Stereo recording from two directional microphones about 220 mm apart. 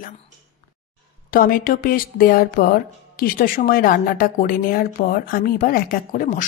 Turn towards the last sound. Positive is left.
turn(degrees=35)  # may be behind; listen again after turning